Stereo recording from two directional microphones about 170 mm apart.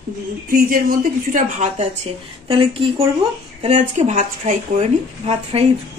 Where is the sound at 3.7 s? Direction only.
45° right (ahead or behind).